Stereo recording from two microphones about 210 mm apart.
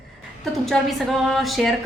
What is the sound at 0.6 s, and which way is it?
A woman's voice, centre (ahead or behind).